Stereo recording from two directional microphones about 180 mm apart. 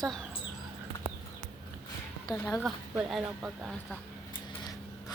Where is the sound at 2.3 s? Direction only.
20° left (ahead or behind).